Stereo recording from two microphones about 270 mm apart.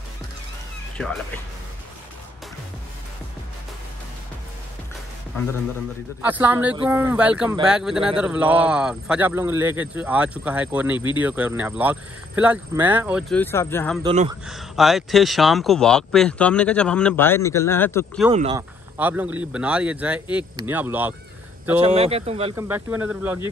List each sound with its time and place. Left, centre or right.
0.9 s speech: centre
6.2 s speech: centre
13.4 s speech: centre
14.0 s speech: right
14.4 s speech: centre
18.3 s speech: right
18.6 s speech: centre
21.8 s speech: right
22.6 s speech: centre